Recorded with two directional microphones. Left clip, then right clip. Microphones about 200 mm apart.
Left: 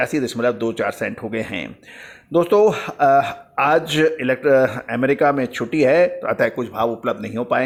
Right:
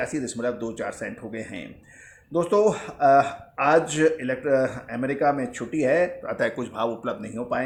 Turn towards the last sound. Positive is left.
turn(degrees=30)  # may be behind; listen again after turning